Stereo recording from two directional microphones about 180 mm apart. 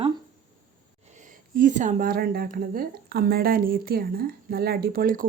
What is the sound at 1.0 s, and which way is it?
Speech, 45° right (ahead or behind).